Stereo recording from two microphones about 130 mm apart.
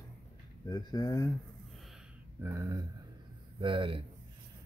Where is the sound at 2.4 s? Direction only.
20° right (ahead or behind).